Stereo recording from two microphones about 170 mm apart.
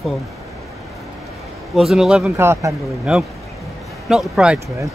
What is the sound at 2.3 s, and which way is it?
Speech, 15° right (ahead or behind).